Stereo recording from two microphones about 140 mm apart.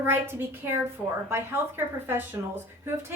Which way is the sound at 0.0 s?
15° right (ahead or behind).